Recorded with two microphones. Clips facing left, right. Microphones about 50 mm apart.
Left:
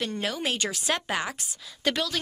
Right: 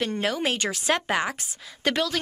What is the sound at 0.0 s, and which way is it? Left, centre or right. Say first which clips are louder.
A woman's voice: right 4 dB; right.